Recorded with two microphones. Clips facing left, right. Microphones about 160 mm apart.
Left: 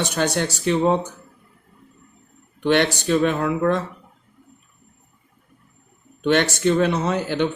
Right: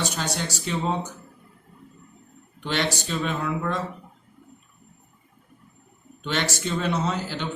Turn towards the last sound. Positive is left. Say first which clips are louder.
# left 7 dB
turn(degrees=60)  # may be behind; listen again after turning